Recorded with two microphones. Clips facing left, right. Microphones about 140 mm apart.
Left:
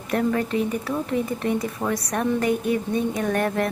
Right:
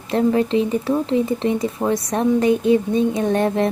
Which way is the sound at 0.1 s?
25° right (ahead or behind).